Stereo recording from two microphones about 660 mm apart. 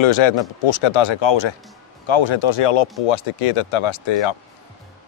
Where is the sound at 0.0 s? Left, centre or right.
Left.